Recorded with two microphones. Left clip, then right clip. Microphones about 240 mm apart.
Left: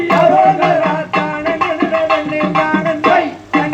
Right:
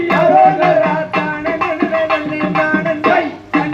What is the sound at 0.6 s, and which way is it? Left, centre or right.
Music, left.